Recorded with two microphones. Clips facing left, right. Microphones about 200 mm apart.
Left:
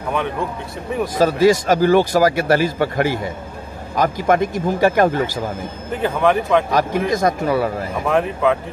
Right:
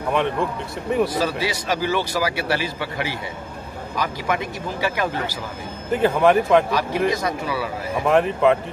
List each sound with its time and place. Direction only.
1.0 s speech: 45° left (ahead or behind)
5.9 s speech: centre (ahead or behind)
6.7 s speech: 50° left (ahead or behind)
8.1 s speech: centre (ahead or behind)